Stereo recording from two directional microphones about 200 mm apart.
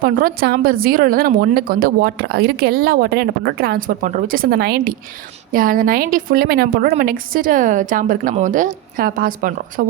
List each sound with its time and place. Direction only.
0.0 s a woman's voice: 45° right (ahead or behind)